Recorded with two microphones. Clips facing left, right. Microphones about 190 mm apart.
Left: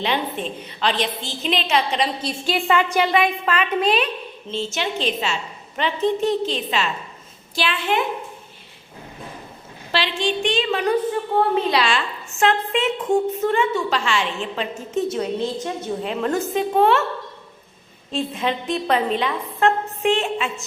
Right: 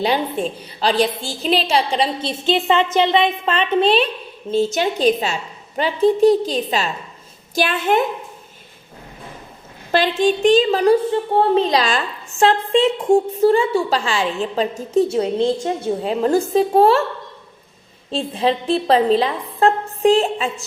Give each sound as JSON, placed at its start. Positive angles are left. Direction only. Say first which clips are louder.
{"t": 0.0, "sound": "a woman's voice", "louder": "right 5 dB", "side_deg": -35}
{"t": 4.5, "sound": "a woman's voice", "louder": "right 7 dB", "side_deg": -40}
{"t": 9.9, "sound": "a woman's voice", "louder": "right 6 dB", "side_deg": -45}
{"t": 18.1, "sound": "a woman's voice", "louder": "right 4 dB", "side_deg": -30}